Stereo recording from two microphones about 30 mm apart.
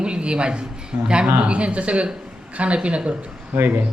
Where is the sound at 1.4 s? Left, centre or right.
Right.